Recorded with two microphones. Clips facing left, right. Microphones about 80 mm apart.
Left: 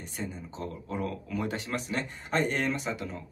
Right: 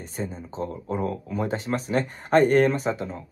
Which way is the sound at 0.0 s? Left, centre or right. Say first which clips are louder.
Right 5 dB; right.